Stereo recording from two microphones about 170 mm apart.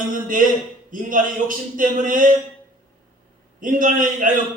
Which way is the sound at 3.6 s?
50° right (ahead or behind).